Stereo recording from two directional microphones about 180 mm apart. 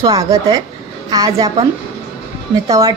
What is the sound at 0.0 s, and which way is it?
A woman's voice, 20° right (ahead or behind).